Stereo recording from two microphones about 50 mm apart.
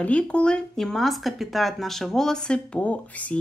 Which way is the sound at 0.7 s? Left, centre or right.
Centre.